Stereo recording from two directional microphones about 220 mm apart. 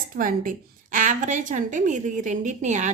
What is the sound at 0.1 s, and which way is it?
A woman's voice, 40° right (ahead or behind).